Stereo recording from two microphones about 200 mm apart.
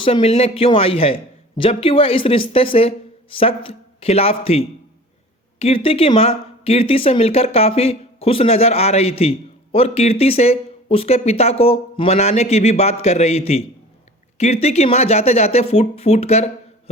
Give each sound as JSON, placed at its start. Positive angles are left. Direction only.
{"t": 0.0, "sound": "a man's voice", "side_deg": 25}